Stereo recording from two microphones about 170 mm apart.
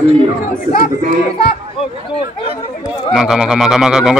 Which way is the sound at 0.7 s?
35° right (ahead or behind).